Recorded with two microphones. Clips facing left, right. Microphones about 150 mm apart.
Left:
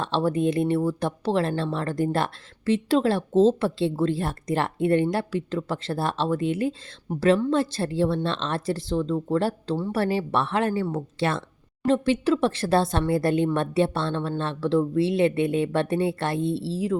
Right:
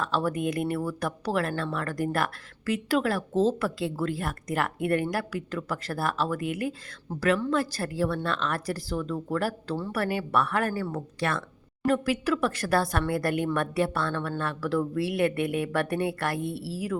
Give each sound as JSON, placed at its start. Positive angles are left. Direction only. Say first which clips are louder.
{"t": 0.0, "sound": "speech", "louder": "left 4 dB", "side_deg": 25}